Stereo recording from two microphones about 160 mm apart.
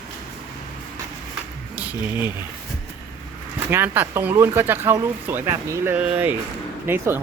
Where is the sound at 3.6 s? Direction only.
10° right (ahead or behind).